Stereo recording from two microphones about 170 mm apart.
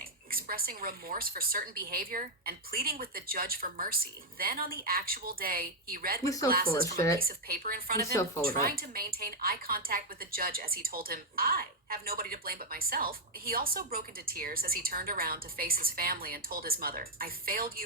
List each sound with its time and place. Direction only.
0.3 s a woman's voice: 60° right (ahead or behind)
6.2 s speech: 20° left (ahead or behind)
6.5 s a woman's voice: 60° right (ahead or behind)
6.9 s speech: 20° left (ahead or behind)
7.2 s a woman's voice: 60° right (ahead or behind)